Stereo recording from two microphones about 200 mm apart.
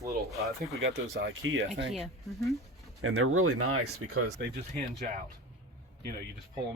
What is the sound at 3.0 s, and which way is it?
Speech, 90° right.